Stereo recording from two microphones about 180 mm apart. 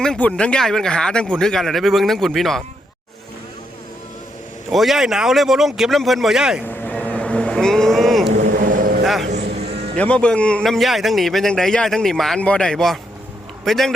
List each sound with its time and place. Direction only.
0.0 s a man's voice: 5° left (ahead or behind)
4.7 s a man's voice: centre (ahead or behind)
6.7 s vehicle: 10° left (ahead or behind)
8.3 s vehicle: 45° right (ahead or behind)
10.0 s a man's voice: 5° left (ahead or behind)